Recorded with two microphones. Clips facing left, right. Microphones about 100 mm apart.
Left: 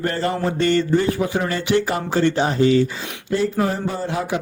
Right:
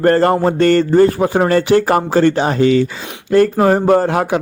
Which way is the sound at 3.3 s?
60° right (ahead or behind).